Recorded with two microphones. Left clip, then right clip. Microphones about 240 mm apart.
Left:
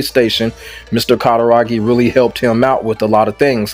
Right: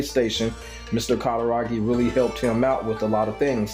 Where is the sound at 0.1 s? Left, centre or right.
Left.